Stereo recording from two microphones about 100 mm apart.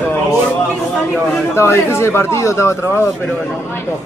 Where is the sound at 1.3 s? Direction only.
25° left (ahead or behind).